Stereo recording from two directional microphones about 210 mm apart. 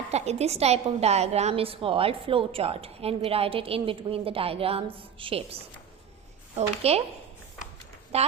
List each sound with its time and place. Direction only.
0.1 s a woman's voice: 30° right (ahead or behind)
6.6 s a woman's voice: 30° right (ahead or behind)
8.1 s a woman's voice: 30° right (ahead or behind)